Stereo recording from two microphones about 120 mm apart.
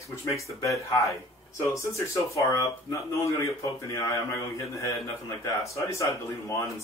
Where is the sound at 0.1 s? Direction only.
25° left (ahead or behind).